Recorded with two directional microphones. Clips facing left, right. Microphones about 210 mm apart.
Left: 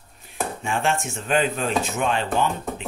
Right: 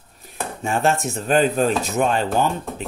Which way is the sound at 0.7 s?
40° right (ahead or behind).